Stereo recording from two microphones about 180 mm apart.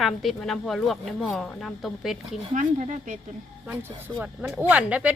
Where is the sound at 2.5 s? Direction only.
45° right (ahead or behind).